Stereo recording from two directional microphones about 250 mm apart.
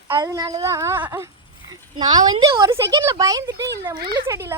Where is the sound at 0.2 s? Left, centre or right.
Centre.